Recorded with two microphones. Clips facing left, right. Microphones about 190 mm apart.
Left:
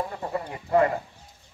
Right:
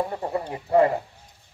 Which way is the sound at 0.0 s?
30° right (ahead or behind).